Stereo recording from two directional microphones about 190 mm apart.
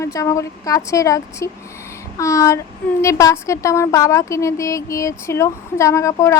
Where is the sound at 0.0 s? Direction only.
15° left (ahead or behind).